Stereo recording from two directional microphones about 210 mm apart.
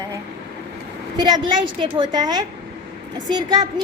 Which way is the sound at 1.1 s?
20° right (ahead or behind).